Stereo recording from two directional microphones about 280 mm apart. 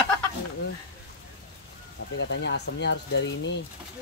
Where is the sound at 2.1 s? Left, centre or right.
Left.